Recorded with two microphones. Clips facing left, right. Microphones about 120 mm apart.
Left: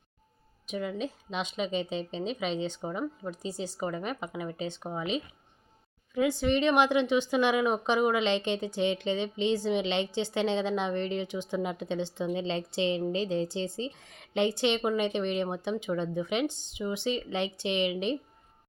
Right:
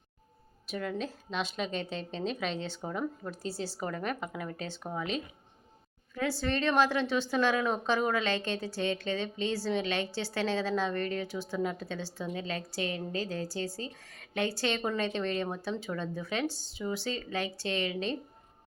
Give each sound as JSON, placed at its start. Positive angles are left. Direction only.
{"t": 0.7, "sound": "a woman's voice", "side_deg": 10}